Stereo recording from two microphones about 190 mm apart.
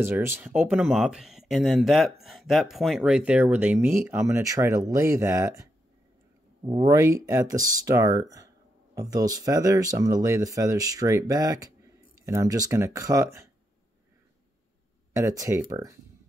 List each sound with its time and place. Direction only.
0.0 s speech: 10° right (ahead or behind)
15.1 s speech: 15° right (ahead or behind)